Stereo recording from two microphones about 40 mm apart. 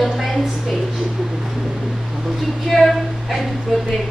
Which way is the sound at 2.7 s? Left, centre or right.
Centre.